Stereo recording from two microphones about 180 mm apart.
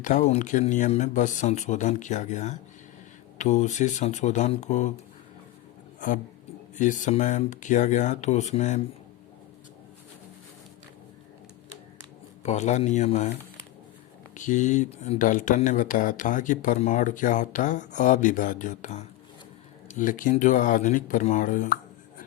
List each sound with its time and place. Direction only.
0.0 s speech: 45° left (ahead or behind)
6.7 s speech: 45° left (ahead or behind)
12.4 s speech: 40° left (ahead or behind)
14.3 s speech: 45° left (ahead or behind)